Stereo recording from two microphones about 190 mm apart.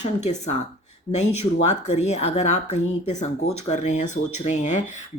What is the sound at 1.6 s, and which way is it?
Speech, 35° left (ahead or behind).